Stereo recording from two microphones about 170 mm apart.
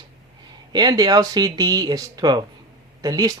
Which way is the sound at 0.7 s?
25° right (ahead or behind).